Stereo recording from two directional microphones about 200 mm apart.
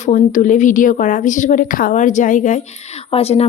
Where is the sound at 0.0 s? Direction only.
35° left (ahead or behind).